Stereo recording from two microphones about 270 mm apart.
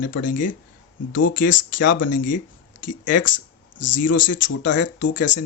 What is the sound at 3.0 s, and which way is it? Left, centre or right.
Speech, left.